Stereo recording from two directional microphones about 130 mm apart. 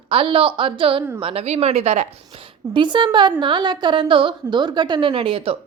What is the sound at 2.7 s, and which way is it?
A woman's voice, 35° right (ahead or behind).